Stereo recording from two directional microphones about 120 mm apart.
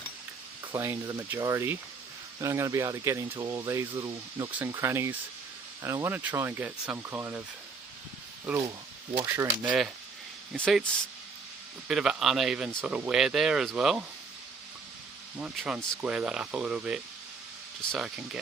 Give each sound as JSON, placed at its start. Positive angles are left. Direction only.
{"t": 0.7, "sound": "speech", "side_deg": -25}
{"t": 3.4, "sound": "speech", "side_deg": -35}
{"t": 4.5, "sound": "speech", "side_deg": -20}
{"t": 9.2, "sound": "speech", "side_deg": -20}
{"t": 10.5, "sound": "speech", "side_deg": 0}
{"t": 11.9, "sound": "speech", "side_deg": -5}
{"t": 15.5, "sound": "speech", "side_deg": -5}